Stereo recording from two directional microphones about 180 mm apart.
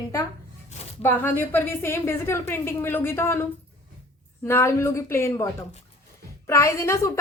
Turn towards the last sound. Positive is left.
turn(degrees=15)  # may be behind; listen again after turning